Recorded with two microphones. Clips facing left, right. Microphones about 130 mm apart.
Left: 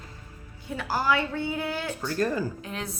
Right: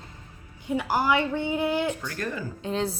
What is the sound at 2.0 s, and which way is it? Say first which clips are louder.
Speech: left 6 dB; 30° left (ahead or behind).